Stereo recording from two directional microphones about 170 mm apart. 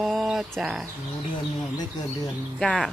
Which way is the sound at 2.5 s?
Centre (ahead or behind).